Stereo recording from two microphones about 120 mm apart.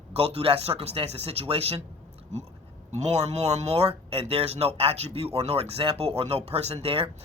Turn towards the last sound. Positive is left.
turn(degrees=-55)  # may be behind; listen again after turning